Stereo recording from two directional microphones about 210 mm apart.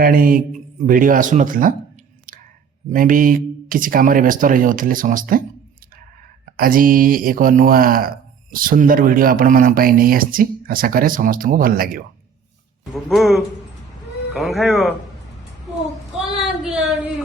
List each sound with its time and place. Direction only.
0.0 s speech: 45° right (ahead or behind)
2.9 s speech: 40° right (ahead or behind)
6.6 s speech: 40° right (ahead or behind)
12.9 s speech: centre (ahead or behind)
16.2 s a sound: centre (ahead or behind)